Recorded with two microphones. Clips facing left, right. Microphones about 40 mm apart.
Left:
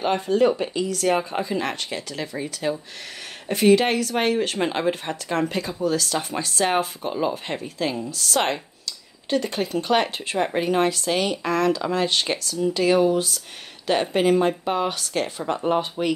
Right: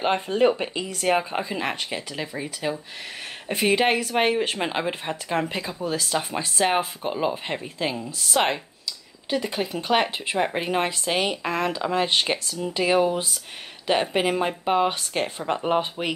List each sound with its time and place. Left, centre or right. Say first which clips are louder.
0.0 s speech: left 1 dB; right; by 2.7 s centre
3.4 s speech: left 3 dB; right
6.6 s speech: even; centre
9.3 s speech: left 2 dB; centre
14.9 s speech: even; right